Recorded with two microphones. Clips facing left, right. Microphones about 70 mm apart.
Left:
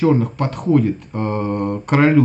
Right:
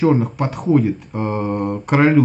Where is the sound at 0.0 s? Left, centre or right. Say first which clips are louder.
Even; centre.